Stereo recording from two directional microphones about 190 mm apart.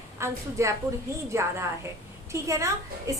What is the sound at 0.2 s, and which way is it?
A woman's voice, 15° right (ahead or behind).